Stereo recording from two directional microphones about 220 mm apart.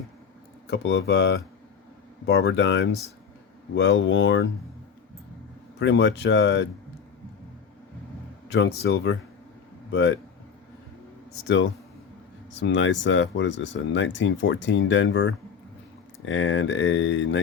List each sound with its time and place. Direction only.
0.7 s speech: 50° left (ahead or behind)
5.8 s speech: 50° left (ahead or behind)
8.5 s speech: 50° left (ahead or behind)
11.4 s speech: 55° left (ahead or behind)